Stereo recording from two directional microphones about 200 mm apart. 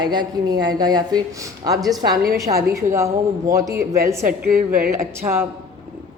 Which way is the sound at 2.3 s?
15° right (ahead or behind).